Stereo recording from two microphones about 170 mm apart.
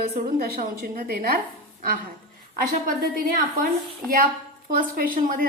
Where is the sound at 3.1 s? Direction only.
55° right (ahead or behind).